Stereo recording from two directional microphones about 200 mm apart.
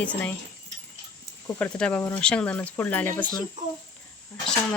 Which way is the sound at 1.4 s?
5° left (ahead or behind).